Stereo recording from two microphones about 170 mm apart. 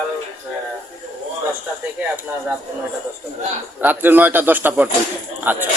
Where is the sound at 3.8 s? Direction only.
10° right (ahead or behind).